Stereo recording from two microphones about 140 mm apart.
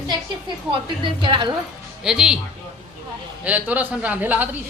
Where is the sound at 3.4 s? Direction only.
10° right (ahead or behind).